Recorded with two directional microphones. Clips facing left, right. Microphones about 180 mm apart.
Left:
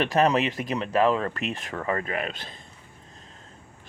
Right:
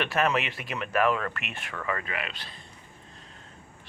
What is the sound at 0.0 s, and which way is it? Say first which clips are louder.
Speech: left 5 dB; 35° left (ahead or behind).